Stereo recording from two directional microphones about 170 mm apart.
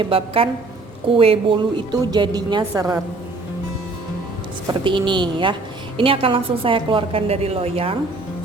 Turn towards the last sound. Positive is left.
turn(degrees=-35)  # may be behind; listen again after turning